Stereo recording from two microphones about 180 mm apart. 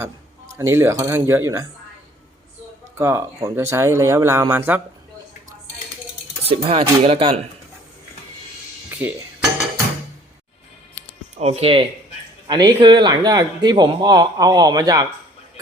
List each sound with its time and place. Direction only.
0.0 s speech: 15° right (ahead or behind)
3.0 s speech: 15° right (ahead or behind)
6.4 s speech: 30° right (ahead or behind)
8.9 s music: 10° right (ahead or behind)
11.3 s a man's voice: 35° right (ahead or behind)